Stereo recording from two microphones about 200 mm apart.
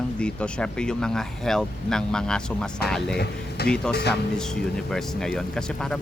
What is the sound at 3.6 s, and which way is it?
Speech, 55° left (ahead or behind).